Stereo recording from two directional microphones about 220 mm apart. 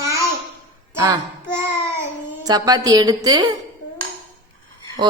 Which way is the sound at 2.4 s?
15° right (ahead or behind).